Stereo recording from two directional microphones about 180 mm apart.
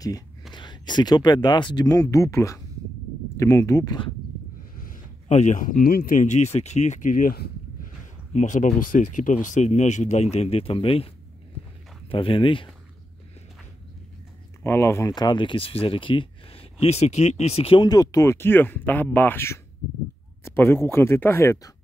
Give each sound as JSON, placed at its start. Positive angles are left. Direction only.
{"t": 0.6, "sound": "speech", "side_deg": 25}
{"t": 4.7, "sound": "speech", "side_deg": 50}
{"t": 8.3, "sound": "speech", "side_deg": 40}
{"t": 12.1, "sound": "speech", "side_deg": 30}
{"t": 14.6, "sound": "speech", "side_deg": 15}